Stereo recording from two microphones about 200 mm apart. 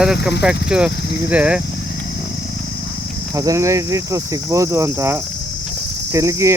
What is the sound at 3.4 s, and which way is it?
Cricket, 15° right (ahead or behind).